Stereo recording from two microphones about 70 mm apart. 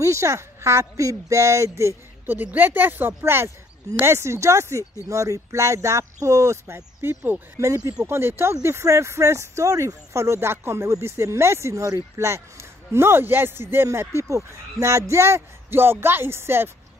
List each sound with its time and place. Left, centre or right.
0.0 s speech: right
2.2 s speech: right
7.5 s speech: right
13.8 s speech: right